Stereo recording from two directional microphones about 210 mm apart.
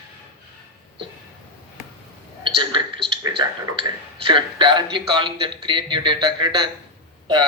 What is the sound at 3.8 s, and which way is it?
Speech, 25° right (ahead or behind).